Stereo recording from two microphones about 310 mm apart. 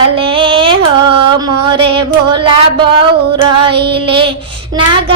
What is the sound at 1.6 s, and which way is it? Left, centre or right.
Music, centre.